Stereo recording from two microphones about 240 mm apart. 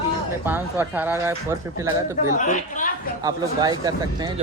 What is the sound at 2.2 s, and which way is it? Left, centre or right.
Speech, left.